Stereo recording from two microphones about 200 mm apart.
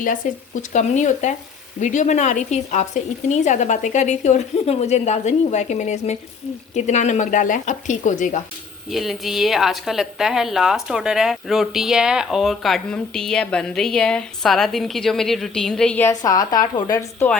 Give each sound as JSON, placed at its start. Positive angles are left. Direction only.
{"t": 0.0, "sound": "speech", "side_deg": 40}
{"t": 8.9, "sound": "a woman's voice", "side_deg": 0}